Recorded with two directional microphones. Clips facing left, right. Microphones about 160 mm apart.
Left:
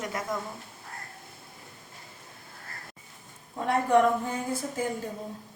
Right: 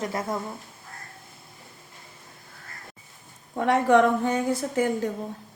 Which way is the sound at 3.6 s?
85° right.